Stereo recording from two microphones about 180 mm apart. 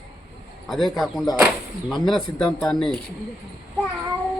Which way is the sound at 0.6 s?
Centre (ahead or behind).